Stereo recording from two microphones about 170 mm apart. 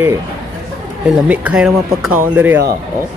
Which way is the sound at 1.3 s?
5° right (ahead or behind).